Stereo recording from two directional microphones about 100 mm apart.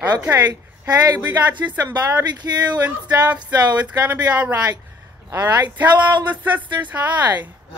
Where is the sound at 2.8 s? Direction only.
15° right (ahead or behind).